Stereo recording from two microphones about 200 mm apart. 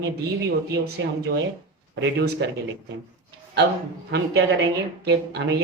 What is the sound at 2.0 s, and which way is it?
Speech, 60° right (ahead or behind).